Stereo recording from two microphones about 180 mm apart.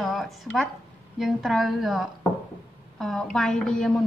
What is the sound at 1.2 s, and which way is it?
Speech, centre (ahead or behind).